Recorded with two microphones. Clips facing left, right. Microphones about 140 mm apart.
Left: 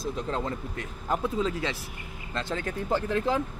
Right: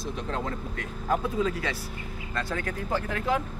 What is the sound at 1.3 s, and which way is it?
Speech, 25° left (ahead or behind).